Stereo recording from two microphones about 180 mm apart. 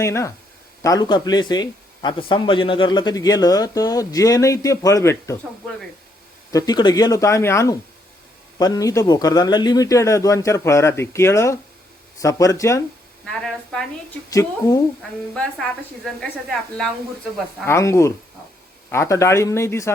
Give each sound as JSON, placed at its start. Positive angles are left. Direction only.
{"t": 0.0, "sound": "a man's voice", "side_deg": 15}
{"t": 6.5, "sound": "a man's voice", "side_deg": 20}
{"t": 13.2, "sound": "a woman's voice", "side_deg": 5}
{"t": 14.3, "sound": "a man's voice", "side_deg": 20}
{"t": 15.4, "sound": "a woman's voice", "side_deg": 5}
{"t": 17.7, "sound": "a man's voice", "side_deg": 15}